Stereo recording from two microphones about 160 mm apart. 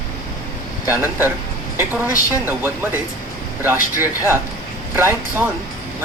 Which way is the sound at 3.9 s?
20° left (ahead or behind).